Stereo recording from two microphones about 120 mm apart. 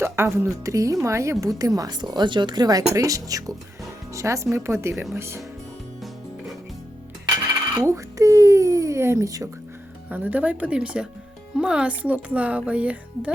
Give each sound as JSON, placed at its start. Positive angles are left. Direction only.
{"t": 0.0, "sound": "a woman's voice", "side_deg": -20}
{"t": 7.9, "sound": "a sound", "side_deg": -25}
{"t": 10.1, "sound": "speech", "side_deg": -15}